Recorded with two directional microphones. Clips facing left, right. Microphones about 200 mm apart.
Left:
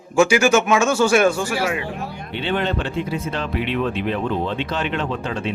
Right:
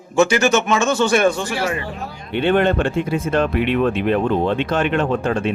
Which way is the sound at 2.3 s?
55° right (ahead or behind).